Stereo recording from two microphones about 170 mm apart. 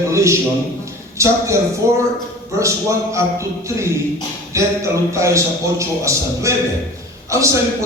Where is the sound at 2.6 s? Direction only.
15° right (ahead or behind).